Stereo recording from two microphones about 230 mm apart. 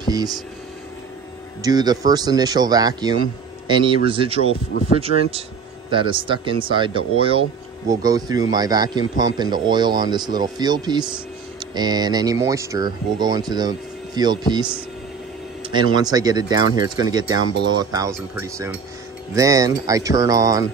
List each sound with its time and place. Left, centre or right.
0.0 s a sound: centre
1.6 s a man's voice: centre
15.7 s a man's voice: centre